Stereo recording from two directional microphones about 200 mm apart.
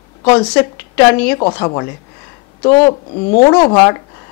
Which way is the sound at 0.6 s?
10° left (ahead or behind).